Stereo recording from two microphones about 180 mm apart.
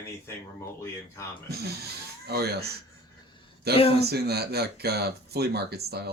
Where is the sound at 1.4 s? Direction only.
60° right (ahead or behind).